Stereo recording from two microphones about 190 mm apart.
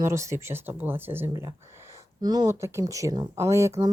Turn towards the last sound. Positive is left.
turn(degrees=-15)  # may be behind; listen again after turning